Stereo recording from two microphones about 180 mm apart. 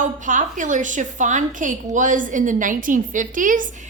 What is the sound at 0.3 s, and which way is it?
A woman's voice, 45° right (ahead or behind).